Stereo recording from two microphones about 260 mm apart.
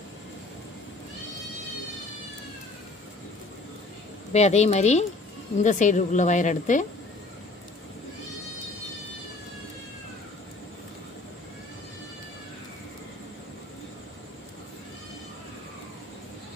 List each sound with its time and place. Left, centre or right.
4.3 s a woman's voice: left